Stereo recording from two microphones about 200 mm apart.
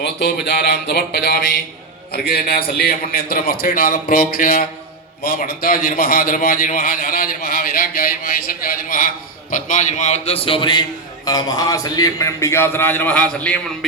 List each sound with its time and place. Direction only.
0.0 s a man's voice: 55° left (ahead or behind); by 13.6 s 5° left (ahead or behind)